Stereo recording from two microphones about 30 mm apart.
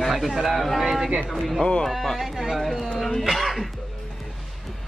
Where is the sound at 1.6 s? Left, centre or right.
Left.